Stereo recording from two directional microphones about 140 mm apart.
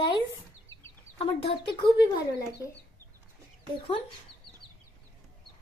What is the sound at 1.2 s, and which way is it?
Speech, 40° left (ahead or behind).